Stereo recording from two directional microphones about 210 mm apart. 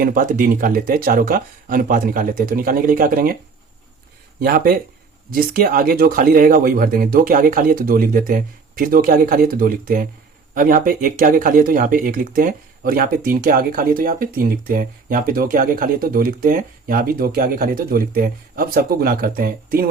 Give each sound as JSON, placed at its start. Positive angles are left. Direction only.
{"t": 0.0, "sound": "speech", "side_deg": -40}
{"t": 4.4, "sound": "speech", "side_deg": -45}